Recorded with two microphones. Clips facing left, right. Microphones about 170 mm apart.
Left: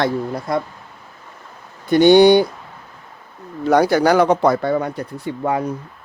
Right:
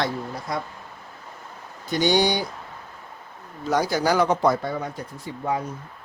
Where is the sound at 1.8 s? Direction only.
60° left (ahead or behind).